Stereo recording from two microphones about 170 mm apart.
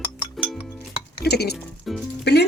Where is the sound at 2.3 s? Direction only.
75° left (ahead or behind).